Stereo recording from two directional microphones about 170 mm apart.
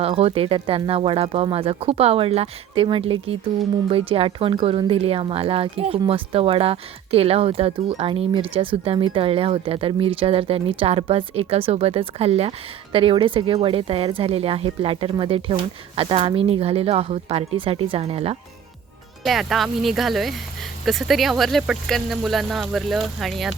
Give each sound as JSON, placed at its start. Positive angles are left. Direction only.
{"t": 0.0, "sound": "speech", "side_deg": -35}
{"t": 19.2, "sound": "speech", "side_deg": 0}